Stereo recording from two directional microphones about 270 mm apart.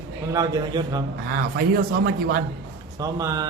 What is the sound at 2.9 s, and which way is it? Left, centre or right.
Speech, centre.